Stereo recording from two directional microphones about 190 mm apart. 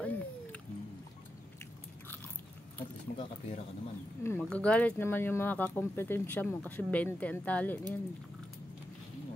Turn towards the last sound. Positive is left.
turn(degrees=5)  # may be behind; listen again after turning